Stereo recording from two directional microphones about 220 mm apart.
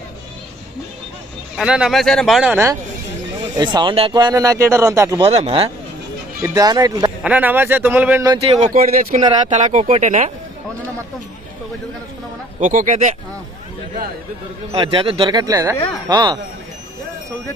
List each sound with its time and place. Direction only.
1.5 s speech: 5° right (ahead or behind)
3.6 s speech: 20° right (ahead or behind)
7.2 s speech: 5° right (ahead or behind)
8.3 s speech: 25° right (ahead or behind)
12.5 s speech: 35° right (ahead or behind)
14.7 s speech: 25° right (ahead or behind)